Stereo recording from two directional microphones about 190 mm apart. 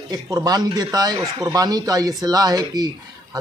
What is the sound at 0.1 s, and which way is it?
Speech, 20° right (ahead or behind).